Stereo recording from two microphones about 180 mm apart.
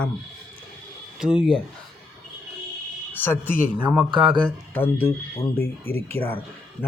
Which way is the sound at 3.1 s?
10° left (ahead or behind).